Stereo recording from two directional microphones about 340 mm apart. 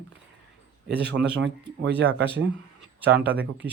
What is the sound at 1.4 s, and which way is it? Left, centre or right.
Speech, right.